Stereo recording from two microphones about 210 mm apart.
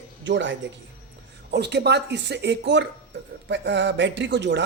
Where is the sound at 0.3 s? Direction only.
60° right (ahead or behind).